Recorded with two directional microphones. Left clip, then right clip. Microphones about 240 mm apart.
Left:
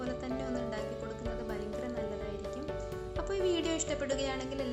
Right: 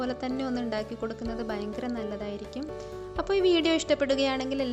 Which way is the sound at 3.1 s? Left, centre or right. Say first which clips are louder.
Right 8 dB; right.